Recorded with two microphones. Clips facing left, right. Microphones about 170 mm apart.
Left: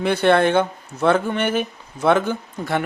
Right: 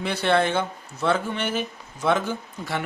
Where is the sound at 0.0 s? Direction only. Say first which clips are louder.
Left 6 dB; 55° left (ahead or behind).